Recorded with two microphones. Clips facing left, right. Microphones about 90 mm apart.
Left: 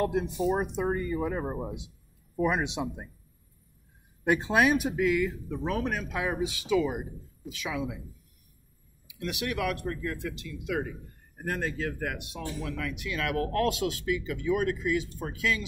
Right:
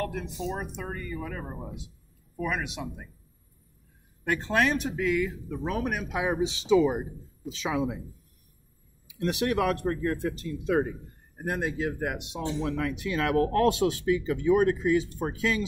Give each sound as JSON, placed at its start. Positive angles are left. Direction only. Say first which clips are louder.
{"t": 0.0, "sound": "speech", "louder": "left 5 dB", "side_deg": 20}
{"t": 4.2, "sound": "speech", "louder": "left 2 dB", "side_deg": 15}
{"t": 9.0, "sound": "speech", "louder": "right 6 dB", "side_deg": -35}
{"t": 11.3, "sound": "speech", "louder": "right 2 dB", "side_deg": -15}